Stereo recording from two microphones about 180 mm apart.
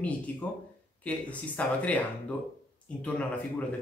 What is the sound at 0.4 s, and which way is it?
Speech, 10° left (ahead or behind).